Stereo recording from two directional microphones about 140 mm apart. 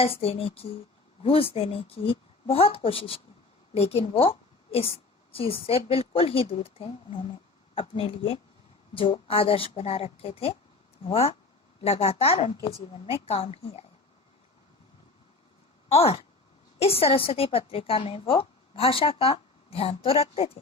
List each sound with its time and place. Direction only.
0.0 s a woman's voice: 45° left (ahead or behind)
12.5 s a woman's voice: 35° left (ahead or behind)
15.9 s a woman's voice: 45° left (ahead or behind)